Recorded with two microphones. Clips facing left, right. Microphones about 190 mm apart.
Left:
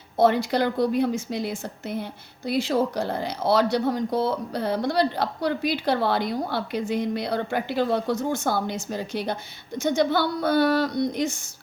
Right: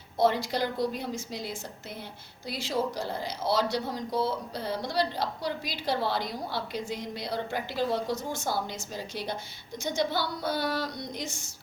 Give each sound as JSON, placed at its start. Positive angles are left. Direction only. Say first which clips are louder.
{"t": 0.2, "sound": "a woman's voice", "louder": "left 6 dB", "side_deg": 60}